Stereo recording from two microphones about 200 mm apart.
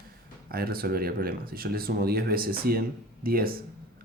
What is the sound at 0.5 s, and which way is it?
Speech, 50° right (ahead or behind).